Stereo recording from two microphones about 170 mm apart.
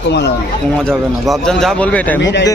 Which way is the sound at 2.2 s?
90° left.